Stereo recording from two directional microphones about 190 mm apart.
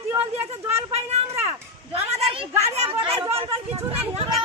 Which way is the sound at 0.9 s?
35° right (ahead or behind).